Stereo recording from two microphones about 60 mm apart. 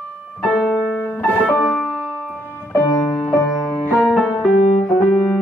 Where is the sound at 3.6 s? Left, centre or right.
Centre.